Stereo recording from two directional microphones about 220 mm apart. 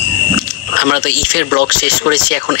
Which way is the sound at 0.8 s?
50° left (ahead or behind).